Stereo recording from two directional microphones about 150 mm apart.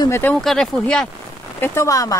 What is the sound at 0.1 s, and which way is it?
Speech, 10° left (ahead or behind).